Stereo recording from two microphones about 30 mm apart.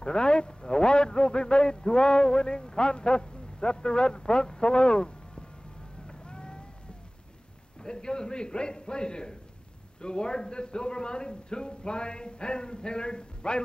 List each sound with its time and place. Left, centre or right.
0.0 s a man's voice: left
6.0 s boat: left
7.8 s a man's voice: left